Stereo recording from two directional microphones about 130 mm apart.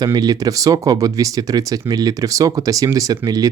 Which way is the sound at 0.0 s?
30° right (ahead or behind).